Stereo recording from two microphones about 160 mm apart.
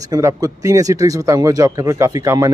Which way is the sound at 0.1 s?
20° right (ahead or behind).